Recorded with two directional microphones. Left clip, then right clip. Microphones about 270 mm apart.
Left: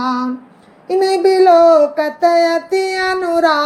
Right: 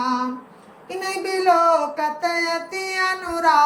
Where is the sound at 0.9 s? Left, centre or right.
Centre.